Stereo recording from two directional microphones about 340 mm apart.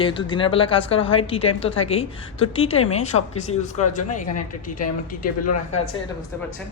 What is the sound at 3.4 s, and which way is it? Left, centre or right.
Speech, centre.